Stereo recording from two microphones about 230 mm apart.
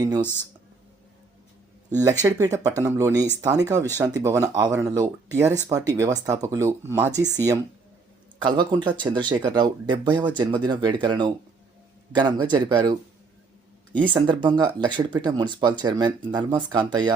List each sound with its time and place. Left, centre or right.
2.2 s speech: centre
14.1 s speech: centre